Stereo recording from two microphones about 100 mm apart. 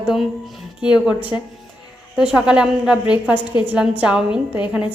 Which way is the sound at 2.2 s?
10° right (ahead or behind).